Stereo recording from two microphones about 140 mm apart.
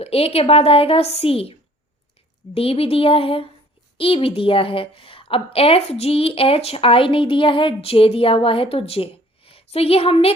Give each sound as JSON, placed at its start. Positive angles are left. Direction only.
{"t": 0.0, "sound": "a woman's voice", "side_deg": 45}
{"t": 2.6, "sound": "a woman's voice", "side_deg": 45}